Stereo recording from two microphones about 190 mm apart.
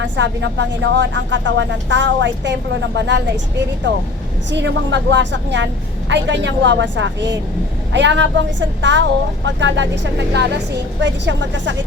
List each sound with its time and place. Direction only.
0.0 s a woman's voice: 70° right (ahead or behind)
4.5 s a woman's voice: 70° right (ahead or behind)